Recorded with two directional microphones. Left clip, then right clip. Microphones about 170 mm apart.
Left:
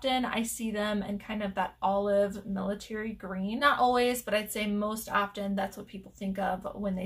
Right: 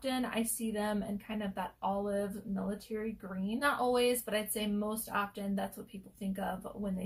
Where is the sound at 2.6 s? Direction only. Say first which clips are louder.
Left 4 dB; 20° left (ahead or behind).